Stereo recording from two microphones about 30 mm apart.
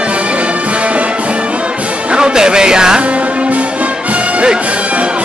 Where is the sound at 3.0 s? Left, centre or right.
Right.